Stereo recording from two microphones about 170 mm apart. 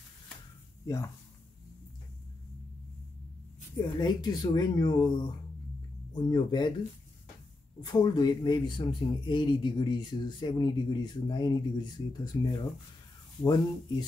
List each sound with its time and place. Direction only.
0.8 s a man's voice: 20° left (ahead or behind)
3.7 s a man's voice: 25° left (ahead or behind)
6.1 s a man's voice: 25° left (ahead or behind)
7.8 s a man's voice: 25° left (ahead or behind)
13.4 s a man's voice: 25° left (ahead or behind)